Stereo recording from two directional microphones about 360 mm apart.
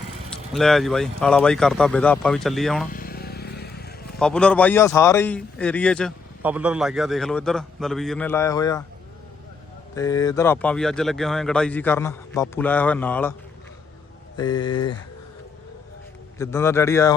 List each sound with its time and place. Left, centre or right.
0.3 s a man's voice: centre
2.9 s vehicle: left
4.2 s a man's voice: centre
9.9 s a man's voice: centre
14.3 s speech: centre
16.4 s speech: centre